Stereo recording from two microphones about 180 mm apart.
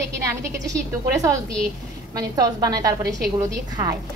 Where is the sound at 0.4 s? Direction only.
15° right (ahead or behind).